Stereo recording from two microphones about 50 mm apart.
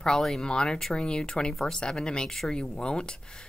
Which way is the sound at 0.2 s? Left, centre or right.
Centre.